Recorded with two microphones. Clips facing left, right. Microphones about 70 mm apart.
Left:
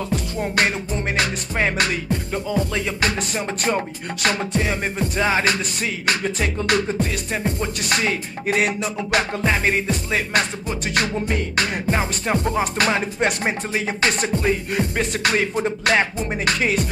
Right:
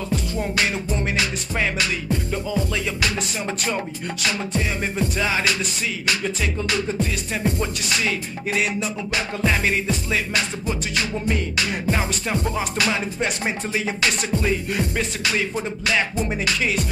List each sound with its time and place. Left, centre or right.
1.1 s music: left
7.4 s music: left
8.5 s music: left
9.4 s music: left
9.8 s music: left
11.9 s music: left
15.2 s music: left
16.0 s music: left